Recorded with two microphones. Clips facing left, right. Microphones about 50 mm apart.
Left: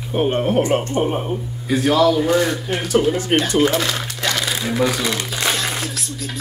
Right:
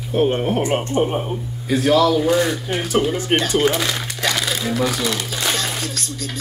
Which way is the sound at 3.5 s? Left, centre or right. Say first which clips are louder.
Left 1 dB; centre.